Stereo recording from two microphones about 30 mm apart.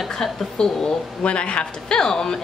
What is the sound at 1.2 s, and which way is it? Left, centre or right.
Speech, left.